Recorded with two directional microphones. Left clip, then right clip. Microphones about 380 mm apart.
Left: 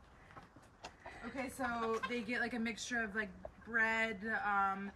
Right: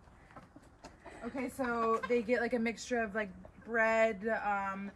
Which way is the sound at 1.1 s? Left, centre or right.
Centre.